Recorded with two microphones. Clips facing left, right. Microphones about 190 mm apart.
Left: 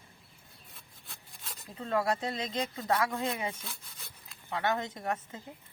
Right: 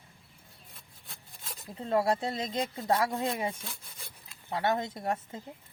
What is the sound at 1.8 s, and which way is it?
Speech, 25° right (ahead or behind).